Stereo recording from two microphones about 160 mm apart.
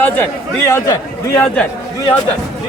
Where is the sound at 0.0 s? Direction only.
10° left (ahead or behind).